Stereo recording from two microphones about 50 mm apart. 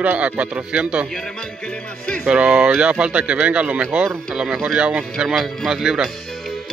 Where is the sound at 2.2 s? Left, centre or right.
Right.